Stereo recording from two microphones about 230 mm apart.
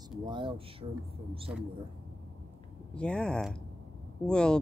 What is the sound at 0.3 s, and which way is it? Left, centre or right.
Speech, right.